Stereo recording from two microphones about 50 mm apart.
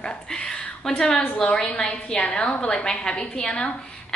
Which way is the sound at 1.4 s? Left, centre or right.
Centre.